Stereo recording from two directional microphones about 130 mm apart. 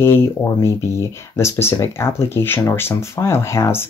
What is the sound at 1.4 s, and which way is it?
Speech, 20° left (ahead or behind).